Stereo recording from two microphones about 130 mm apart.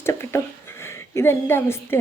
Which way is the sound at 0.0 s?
20° left (ahead or behind).